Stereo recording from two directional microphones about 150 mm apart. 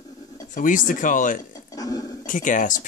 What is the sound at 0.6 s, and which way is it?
Speech, 60° left (ahead or behind).